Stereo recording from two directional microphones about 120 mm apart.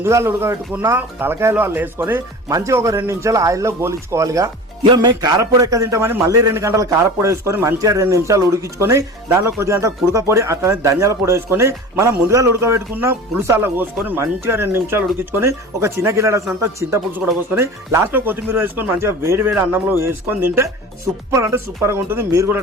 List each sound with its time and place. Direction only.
0.0 s a man's voice: 20° right (ahead or behind)
4.8 s a man's voice: 40° right (ahead or behind); by 22.6 s 20° right (ahead or behind)